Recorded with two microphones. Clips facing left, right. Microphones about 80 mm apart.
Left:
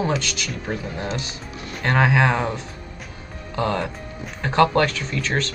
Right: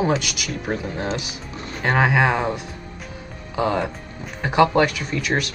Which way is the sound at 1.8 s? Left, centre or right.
Centre.